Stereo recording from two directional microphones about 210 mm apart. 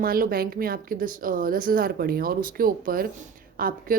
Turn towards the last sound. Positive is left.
turn(degrees=-45)  # may be behind; listen again after turning